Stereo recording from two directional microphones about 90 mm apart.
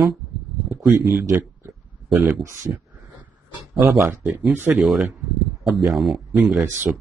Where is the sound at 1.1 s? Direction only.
30° right (ahead or behind).